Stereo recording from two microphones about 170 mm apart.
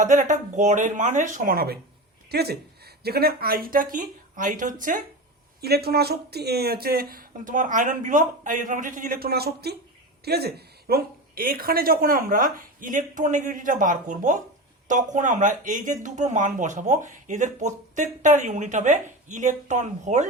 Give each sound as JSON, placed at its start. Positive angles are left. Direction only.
{"t": 0.0, "sound": "speech", "side_deg": -50}
{"t": 5.5, "sound": "speech", "side_deg": -70}